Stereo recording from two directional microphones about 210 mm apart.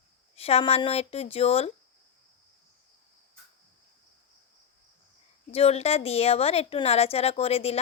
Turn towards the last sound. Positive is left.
turn(degrees=30)  # may be behind; listen again after turning